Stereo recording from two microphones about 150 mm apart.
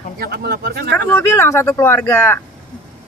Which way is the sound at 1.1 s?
15° left (ahead or behind).